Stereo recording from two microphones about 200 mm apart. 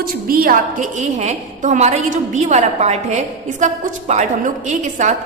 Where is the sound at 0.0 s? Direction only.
45° right (ahead or behind).